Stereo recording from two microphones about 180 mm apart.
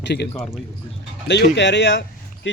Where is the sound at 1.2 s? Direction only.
75° left (ahead or behind).